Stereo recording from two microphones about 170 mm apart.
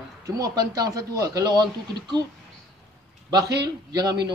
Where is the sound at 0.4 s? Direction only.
20° right (ahead or behind).